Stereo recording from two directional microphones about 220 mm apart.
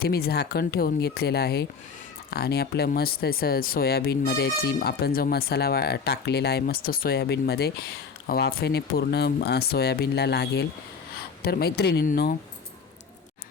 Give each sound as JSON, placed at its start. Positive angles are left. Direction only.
{"t": 0.0, "sound": "speech", "side_deg": 45}